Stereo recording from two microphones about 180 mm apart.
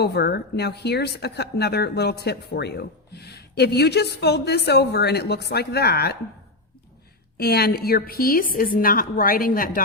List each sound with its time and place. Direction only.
0.0 s speech: 65° left (ahead or behind)
7.3 s a woman's voice: 65° left (ahead or behind)